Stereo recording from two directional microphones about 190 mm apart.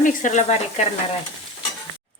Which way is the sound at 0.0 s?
40° left (ahead or behind).